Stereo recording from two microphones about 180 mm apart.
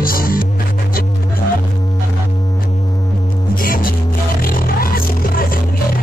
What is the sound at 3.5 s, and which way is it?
Music, 50° left (ahead or behind).